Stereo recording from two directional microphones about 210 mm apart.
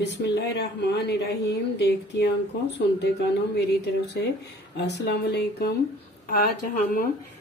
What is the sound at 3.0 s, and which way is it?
Speech, 55° left (ahead or behind).